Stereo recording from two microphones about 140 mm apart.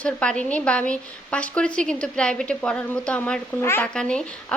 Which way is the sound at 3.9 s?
5° left (ahead or behind).